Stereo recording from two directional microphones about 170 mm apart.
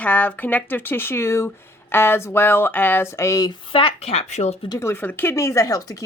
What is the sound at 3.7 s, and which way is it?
Speech, 30° left (ahead or behind).